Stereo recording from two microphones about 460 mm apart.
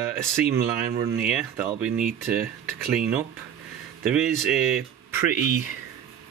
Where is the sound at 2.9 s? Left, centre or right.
Centre.